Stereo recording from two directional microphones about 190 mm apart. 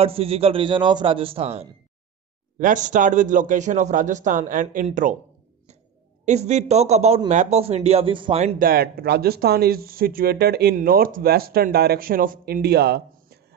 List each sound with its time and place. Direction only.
0.0 s a man's voice: 30° right (ahead or behind)
6.2 s a man's voice: 35° right (ahead or behind)
8.5 s speech: 50° right (ahead or behind)